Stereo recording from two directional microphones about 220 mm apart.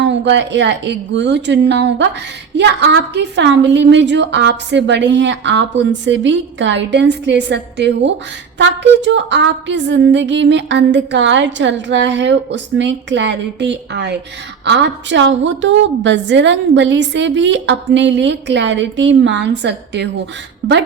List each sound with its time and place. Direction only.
0.0 s music: 55° right (ahead or behind)
14.6 s a woman's voice: 50° right (ahead or behind)
20.6 s music: 50° right (ahead or behind)